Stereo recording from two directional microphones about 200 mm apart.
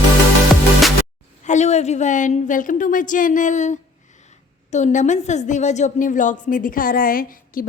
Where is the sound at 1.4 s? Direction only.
35° left (ahead or behind).